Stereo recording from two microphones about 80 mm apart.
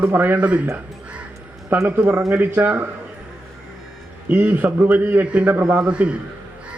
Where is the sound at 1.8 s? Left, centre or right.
Right.